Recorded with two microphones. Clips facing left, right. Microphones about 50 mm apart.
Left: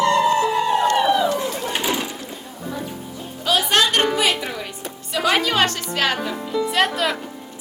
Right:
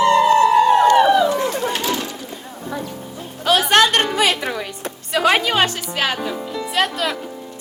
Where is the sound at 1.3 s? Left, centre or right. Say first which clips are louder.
Right 4 dB; right.